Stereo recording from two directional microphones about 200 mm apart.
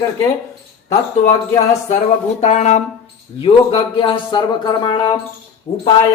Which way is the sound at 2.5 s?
35° left (ahead or behind).